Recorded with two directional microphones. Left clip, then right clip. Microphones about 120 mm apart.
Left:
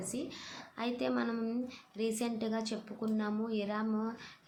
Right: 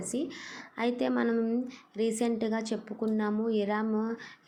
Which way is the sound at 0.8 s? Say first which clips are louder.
Right 6 dB; 30° right (ahead or behind).